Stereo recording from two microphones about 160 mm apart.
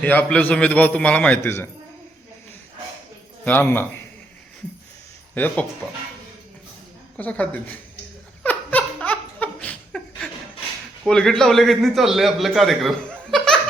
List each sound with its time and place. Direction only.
0.0 s a man's voice: 10° left (ahead or behind)
3.4 s a man's voice: 10° left (ahead or behind)
5.3 s speech: 10° left (ahead or behind)
7.2 s a man's voice: 10° left (ahead or behind)
8.4 s laughter: 10° left (ahead or behind)
11.0 s a man's voice: 5° left (ahead or behind)